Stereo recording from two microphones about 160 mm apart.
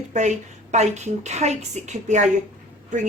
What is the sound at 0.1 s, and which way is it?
Speech, 45° right (ahead or behind).